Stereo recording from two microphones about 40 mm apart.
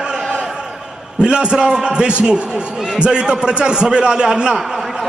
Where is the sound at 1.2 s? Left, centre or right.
Right.